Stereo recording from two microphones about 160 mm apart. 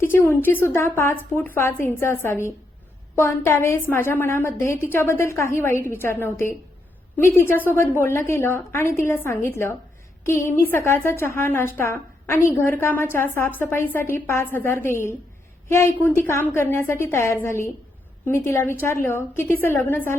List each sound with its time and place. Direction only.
0.0 s a woman's voice: 15° left (ahead or behind)